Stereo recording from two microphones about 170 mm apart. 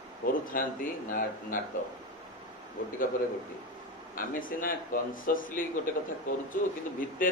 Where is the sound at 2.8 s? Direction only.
55° left (ahead or behind).